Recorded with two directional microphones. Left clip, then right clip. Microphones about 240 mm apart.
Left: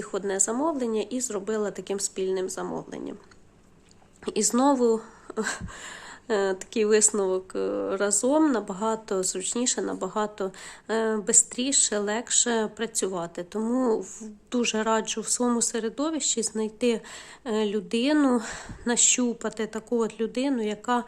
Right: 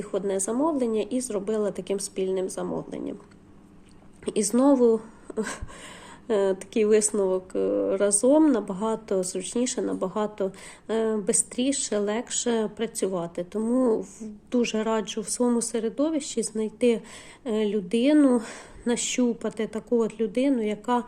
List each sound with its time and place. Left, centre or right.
0.0 s speech: left
4.3 s speech: centre